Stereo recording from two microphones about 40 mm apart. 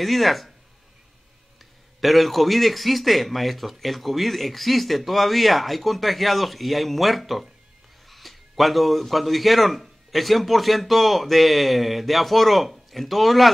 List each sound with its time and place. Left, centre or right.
0.0 s a man's voice: centre
2.0 s a man's voice: centre